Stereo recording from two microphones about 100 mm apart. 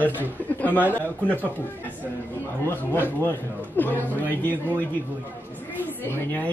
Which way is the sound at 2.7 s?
20° left (ahead or behind).